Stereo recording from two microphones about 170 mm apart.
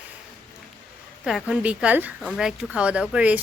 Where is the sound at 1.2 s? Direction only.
5° right (ahead or behind).